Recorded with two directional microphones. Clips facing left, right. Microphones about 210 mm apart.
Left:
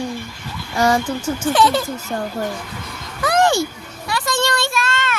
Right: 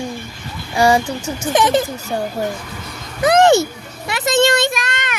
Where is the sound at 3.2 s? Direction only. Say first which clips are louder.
Right 5 dB; 20° right (ahead or behind).